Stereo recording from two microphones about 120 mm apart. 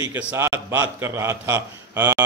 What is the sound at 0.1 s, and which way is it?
A man's voice, 20° right (ahead or behind).